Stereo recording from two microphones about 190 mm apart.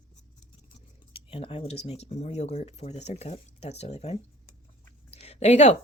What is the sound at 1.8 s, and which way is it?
Speech, 35° left (ahead or behind).